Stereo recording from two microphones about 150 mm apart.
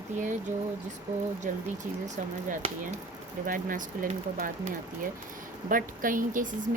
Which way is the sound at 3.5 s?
65° right (ahead or behind).